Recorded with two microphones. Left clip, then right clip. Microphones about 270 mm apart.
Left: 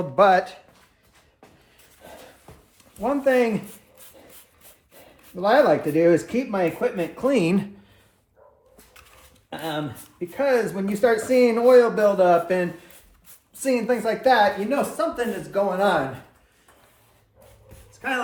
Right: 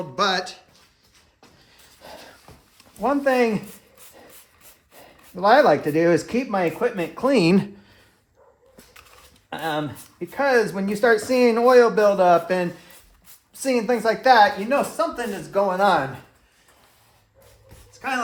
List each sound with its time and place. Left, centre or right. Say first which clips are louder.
0.2 s speech: left 6 dB; centre
3.0 s speech: right 1 dB; right
5.3 s speech: right 2 dB; right
9.5 s speech: right 3 dB; right
14.9 s speech: even; centre
15.5 s speech: right 2 dB; right